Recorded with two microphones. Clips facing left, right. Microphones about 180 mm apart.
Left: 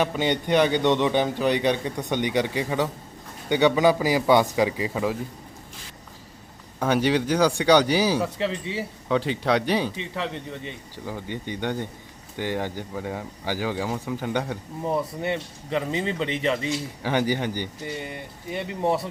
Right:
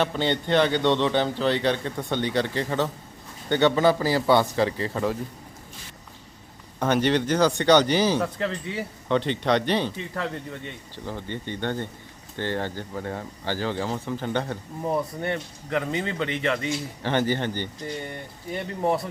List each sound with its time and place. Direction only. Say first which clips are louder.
0.0 s speech: left 1 dB; 10° left (ahead or behind)
6.7 s speech: even; 5° left (ahead or behind)
15.7 s speech: left 1 dB; 25° left (ahead or behind)
16.5 s speech: left 1 dB; 10° left (ahead or behind)